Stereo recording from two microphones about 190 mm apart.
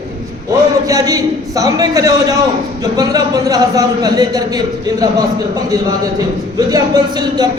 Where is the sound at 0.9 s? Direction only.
20° right (ahead or behind).